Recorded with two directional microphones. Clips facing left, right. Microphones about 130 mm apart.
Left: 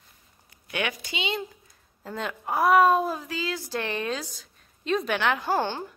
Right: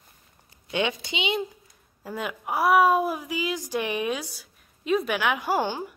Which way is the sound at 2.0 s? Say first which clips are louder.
Even; 10° right (ahead or behind).